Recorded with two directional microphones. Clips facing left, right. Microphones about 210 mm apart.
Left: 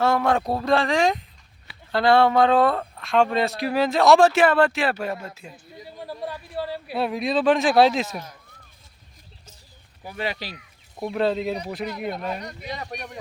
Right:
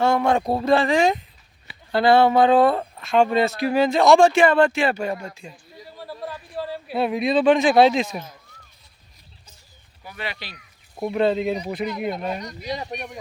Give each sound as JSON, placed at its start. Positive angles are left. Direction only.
{"t": 0.0, "sound": "speech", "side_deg": 0}
{"t": 10.1, "sound": "speech", "side_deg": 40}
{"t": 10.9, "sound": "speech", "side_deg": -5}